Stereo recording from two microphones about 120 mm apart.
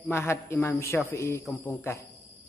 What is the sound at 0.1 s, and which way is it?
A man's voice, 20° left (ahead or behind).